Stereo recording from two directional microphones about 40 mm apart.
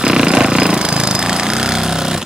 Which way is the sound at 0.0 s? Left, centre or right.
Centre.